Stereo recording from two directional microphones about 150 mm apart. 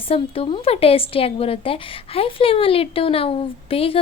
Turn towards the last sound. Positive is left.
turn(degrees=40)  # may be behind; listen again after turning